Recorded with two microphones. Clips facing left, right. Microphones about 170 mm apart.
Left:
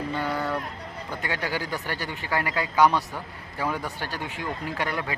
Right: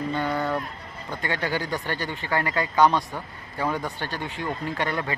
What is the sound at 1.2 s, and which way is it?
Speech, 10° left (ahead or behind).